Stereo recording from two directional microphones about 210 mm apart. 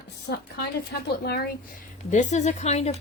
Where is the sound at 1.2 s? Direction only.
50° left (ahead or behind).